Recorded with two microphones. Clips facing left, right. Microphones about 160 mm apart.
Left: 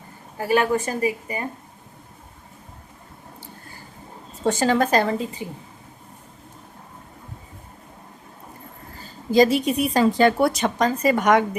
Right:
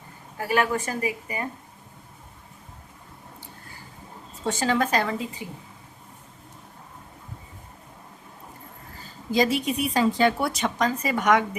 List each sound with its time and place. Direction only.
0.3 s a woman's voice: 30° left (ahead or behind)
4.4 s speech: 45° left (ahead or behind)
9.3 s a woman's voice: 35° left (ahead or behind)